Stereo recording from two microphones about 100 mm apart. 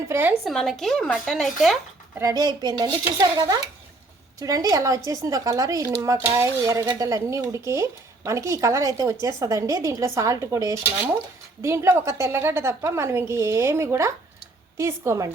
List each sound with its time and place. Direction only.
0.1 s a woman's voice: 20° right (ahead or behind)
0.4 s speech: centre (ahead or behind)
2.2 s a woman's voice: 40° right (ahead or behind)